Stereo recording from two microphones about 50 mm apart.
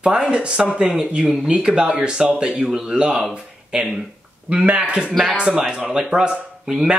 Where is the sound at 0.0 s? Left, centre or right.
Centre.